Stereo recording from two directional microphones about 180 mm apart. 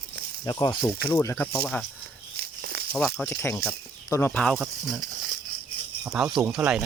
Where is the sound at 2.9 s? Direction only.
Centre (ahead or behind).